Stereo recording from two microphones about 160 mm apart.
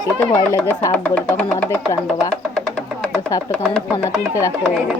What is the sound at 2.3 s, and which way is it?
Music, 5° left (ahead or behind).